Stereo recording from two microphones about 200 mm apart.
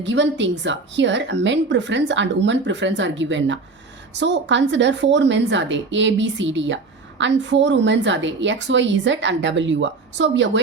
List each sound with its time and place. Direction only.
0.0 s a woman's voice: 65° right (ahead or behind)